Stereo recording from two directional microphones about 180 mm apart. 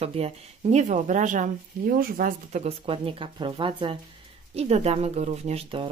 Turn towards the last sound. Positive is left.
turn(degrees=-30)  # may be behind; listen again after turning